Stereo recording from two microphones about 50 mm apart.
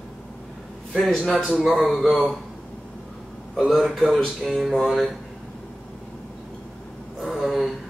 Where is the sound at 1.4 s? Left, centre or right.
Centre.